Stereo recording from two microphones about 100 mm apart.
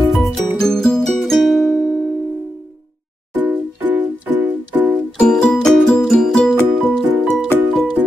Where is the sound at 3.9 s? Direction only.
15° right (ahead or behind).